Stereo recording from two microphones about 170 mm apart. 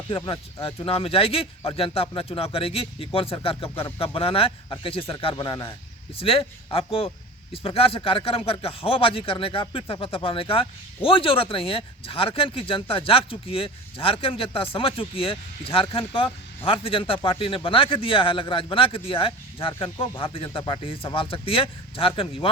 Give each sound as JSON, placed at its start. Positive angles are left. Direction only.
{"t": 0.1, "sound": "speech", "side_deg": 30}